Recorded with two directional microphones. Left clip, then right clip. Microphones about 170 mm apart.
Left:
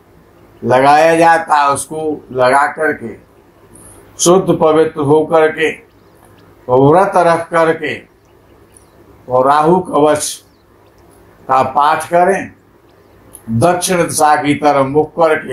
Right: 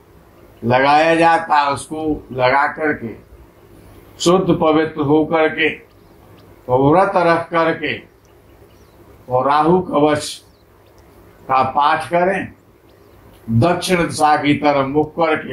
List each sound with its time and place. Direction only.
0.7 s speech: 45° left (ahead or behind)
4.2 s speech: 45° left (ahead or behind)
6.7 s speech: 45° left (ahead or behind)
9.3 s speech: 45° left (ahead or behind)
11.4 s speech: 45° left (ahead or behind)
13.6 s speech: 45° left (ahead or behind)